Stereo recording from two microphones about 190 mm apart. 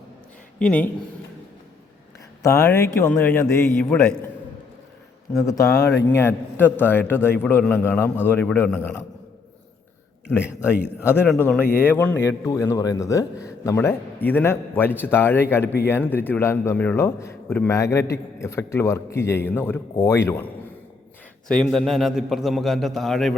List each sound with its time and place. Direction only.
0.6 s a man's voice: 5° left (ahead or behind)
2.4 s a man's voice: 15° left (ahead or behind)
5.4 s a man's voice: 15° left (ahead or behind)
10.2 s a man's voice: 10° left (ahead or behind)
15.6 s speech: 60° left (ahead or behind)
15.9 s a man's voice: 10° left (ahead or behind)
21.4 s a man's voice: 5° left (ahead or behind)